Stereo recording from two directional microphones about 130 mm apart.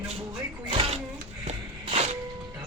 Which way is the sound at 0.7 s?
50° right (ahead or behind).